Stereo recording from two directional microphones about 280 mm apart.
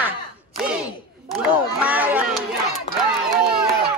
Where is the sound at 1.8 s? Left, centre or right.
Centre.